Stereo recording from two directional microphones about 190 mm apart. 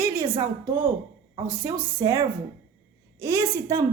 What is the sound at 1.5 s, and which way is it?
A woman's voice, 10° right (ahead or behind).